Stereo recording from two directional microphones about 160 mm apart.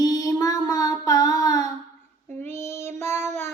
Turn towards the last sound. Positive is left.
turn(degrees=15)  # may be behind; listen again after turning